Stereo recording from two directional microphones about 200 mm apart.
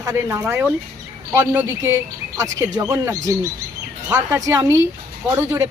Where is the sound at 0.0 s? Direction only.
15° right (ahead or behind).